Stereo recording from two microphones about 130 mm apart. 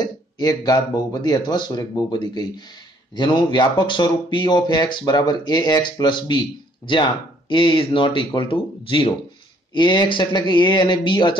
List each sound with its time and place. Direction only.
0.0 s speech: 30° left (ahead or behind)